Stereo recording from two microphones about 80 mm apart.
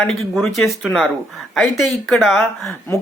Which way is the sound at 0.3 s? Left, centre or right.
Centre.